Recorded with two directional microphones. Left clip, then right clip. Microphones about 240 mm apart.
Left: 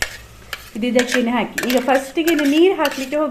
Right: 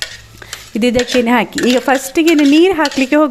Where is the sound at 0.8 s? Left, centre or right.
Right.